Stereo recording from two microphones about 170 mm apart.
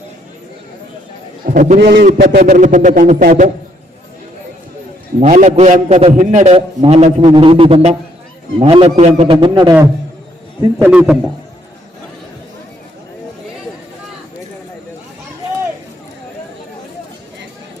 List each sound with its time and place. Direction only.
1.5 s a man's voice: 45° right (ahead or behind)
1.8 s a man's voice: 75° right (ahead or behind)
2.4 s a man's voice: 45° right (ahead or behind)
5.2 s a man's voice: 45° right (ahead or behind); by 10.9 s 20° right (ahead or behind)
10.9 s a man's voice: 5° right (ahead or behind)